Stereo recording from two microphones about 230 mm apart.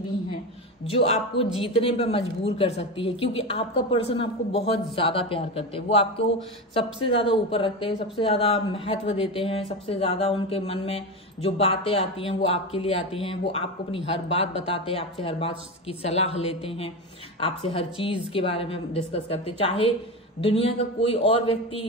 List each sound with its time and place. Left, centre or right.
0.8 s a woman's voice: left